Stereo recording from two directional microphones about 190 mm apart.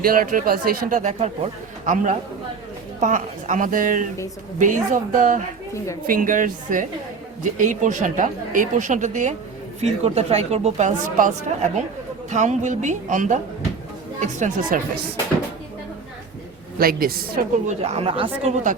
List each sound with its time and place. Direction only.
0.0 s speech: 50° right (ahead or behind)
16.7 s speech: 50° right (ahead or behind)
17.7 s speech: 35° right (ahead or behind)